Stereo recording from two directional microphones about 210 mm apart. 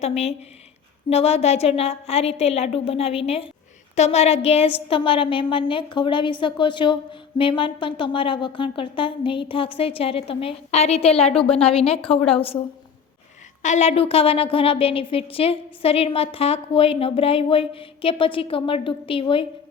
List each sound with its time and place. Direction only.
0.0 s a woman's voice: 30° left (ahead or behind)
13.6 s a woman's voice: 35° left (ahead or behind)